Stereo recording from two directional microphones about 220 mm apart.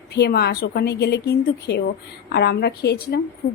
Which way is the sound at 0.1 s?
45° left (ahead or behind).